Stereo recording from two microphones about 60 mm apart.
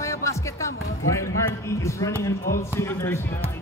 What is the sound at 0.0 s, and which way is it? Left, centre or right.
Music, left.